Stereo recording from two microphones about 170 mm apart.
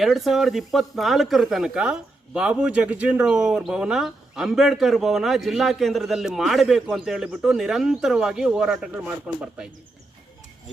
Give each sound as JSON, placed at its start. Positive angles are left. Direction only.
{"t": 0.0, "sound": "speech", "side_deg": 0}